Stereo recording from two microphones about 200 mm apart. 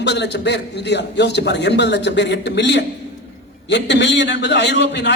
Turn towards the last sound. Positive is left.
turn(degrees=60)  # may be behind; listen again after turning